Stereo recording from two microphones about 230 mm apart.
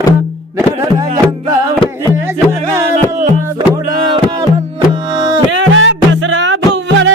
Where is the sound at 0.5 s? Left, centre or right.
Centre.